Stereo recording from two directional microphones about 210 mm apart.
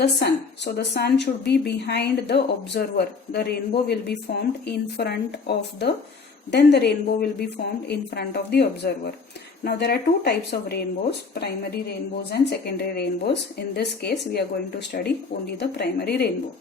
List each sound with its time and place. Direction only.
0.0 s a woman's voice: 55° left (ahead or behind)